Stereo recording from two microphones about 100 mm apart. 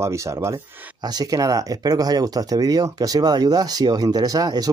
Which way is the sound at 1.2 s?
35° right (ahead or behind).